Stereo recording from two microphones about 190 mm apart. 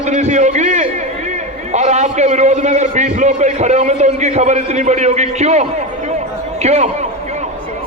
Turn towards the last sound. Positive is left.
turn(degrees=-35)  # may be behind; listen again after turning